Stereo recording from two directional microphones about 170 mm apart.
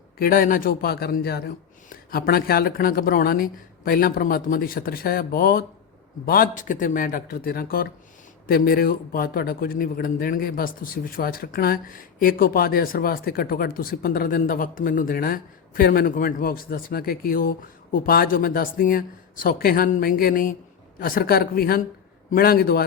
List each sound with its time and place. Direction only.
0.2 s a man's voice: 55° left (ahead or behind)